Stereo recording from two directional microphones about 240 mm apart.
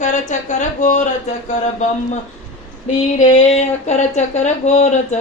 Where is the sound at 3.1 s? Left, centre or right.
Left.